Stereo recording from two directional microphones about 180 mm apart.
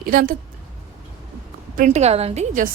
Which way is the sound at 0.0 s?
55° right (ahead or behind).